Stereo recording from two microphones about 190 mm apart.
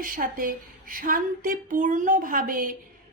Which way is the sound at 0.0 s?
50° right (ahead or behind).